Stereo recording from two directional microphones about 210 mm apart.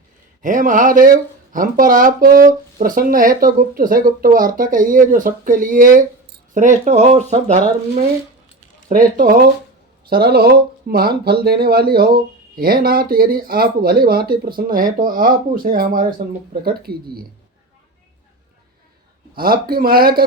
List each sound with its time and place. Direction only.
0.4 s speech: 40° right (ahead or behind)
8.9 s speech: 40° right (ahead or behind)
19.4 s speech: 45° right (ahead or behind)